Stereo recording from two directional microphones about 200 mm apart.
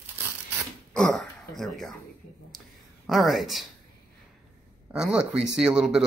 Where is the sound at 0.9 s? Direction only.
5° left (ahead or behind).